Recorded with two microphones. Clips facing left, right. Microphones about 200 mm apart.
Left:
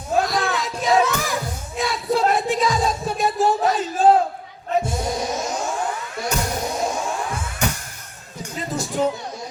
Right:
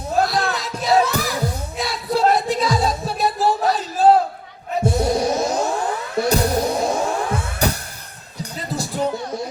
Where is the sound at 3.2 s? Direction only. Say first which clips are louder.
Even; 35° right (ahead or behind).